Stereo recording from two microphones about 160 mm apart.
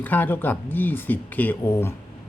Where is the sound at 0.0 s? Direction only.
10° left (ahead or behind).